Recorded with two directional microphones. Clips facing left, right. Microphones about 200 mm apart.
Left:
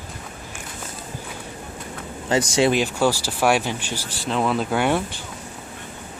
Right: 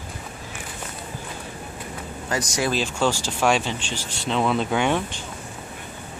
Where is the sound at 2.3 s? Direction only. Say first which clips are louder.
Left 6 dB; 30° left (ahead or behind).